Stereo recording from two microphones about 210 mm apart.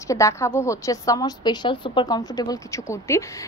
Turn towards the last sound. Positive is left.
turn(degrees=15)  # may be behind; listen again after turning